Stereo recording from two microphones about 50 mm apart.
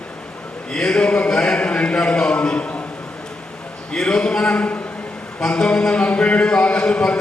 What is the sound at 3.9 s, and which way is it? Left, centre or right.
A man's voice, centre.